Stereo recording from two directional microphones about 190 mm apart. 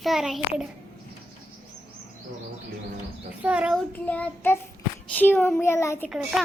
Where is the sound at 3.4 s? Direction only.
5° right (ahead or behind).